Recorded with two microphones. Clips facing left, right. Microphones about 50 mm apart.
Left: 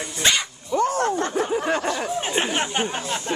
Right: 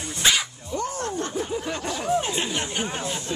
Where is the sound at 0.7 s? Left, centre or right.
Left.